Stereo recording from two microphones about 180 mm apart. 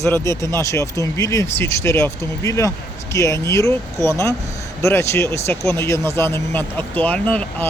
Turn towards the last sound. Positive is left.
turn(degrees=10)  # may be behind; listen again after turning